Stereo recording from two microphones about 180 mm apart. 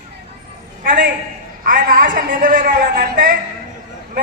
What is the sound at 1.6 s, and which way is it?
A woman's voice, 50° right (ahead or behind).